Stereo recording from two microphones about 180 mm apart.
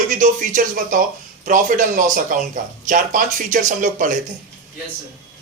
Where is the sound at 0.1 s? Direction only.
45° right (ahead or behind).